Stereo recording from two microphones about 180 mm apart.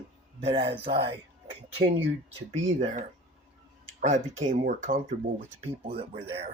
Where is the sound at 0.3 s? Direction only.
30° right (ahead or behind).